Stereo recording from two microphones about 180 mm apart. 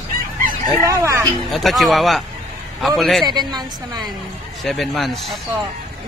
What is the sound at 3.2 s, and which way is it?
Speech, 25° right (ahead or behind).